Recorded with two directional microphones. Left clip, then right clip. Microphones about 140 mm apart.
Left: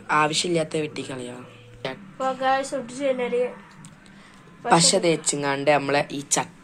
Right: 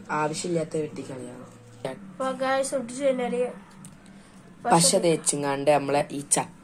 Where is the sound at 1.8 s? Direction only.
5° right (ahead or behind).